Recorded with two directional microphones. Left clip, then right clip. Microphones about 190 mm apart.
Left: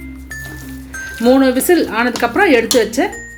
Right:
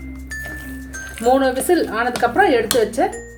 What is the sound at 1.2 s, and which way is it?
Speech, 40° left (ahead or behind).